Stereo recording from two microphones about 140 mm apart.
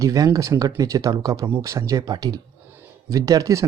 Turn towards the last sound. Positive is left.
turn(degrees=-20)  # may be behind; listen again after turning